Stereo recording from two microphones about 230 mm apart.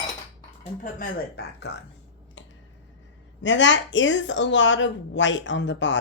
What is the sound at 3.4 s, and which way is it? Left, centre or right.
A woman's voice, left.